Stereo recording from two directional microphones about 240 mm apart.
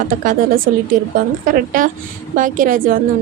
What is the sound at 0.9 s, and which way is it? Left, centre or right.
A woman's voice, right.